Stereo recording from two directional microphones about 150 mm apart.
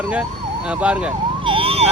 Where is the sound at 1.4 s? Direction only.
35° right (ahead or behind).